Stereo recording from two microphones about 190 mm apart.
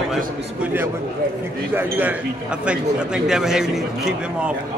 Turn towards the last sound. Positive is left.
turn(degrees=-5)  # may be behind; listen again after turning